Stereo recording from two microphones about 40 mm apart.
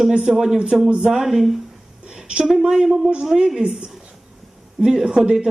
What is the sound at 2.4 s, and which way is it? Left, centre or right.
Speech, centre.